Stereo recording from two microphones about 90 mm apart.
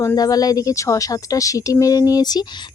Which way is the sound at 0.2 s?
45° left (ahead or behind).